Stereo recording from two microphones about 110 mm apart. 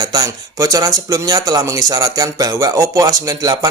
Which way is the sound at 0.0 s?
35° right (ahead or behind).